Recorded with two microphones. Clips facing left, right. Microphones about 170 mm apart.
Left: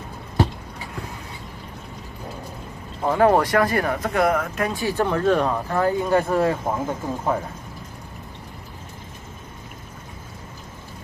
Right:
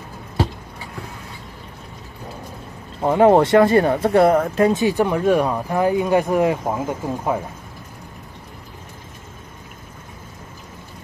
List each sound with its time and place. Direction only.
3.0 s speech: 20° right (ahead or behind)